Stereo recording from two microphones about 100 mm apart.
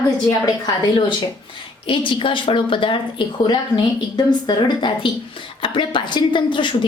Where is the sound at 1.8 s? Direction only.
60° left (ahead or behind).